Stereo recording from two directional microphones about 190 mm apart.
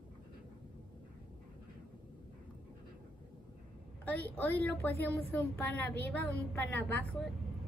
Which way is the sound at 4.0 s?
10° left (ahead or behind).